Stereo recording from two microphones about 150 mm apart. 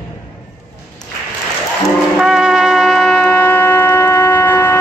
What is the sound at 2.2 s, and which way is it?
Shofar, 5° right (ahead or behind).